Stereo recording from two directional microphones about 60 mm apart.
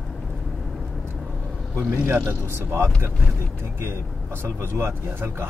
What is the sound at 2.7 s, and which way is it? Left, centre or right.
Speech, right.